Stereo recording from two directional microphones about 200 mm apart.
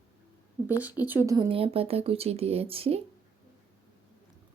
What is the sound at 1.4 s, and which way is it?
Speech, 25° right (ahead or behind).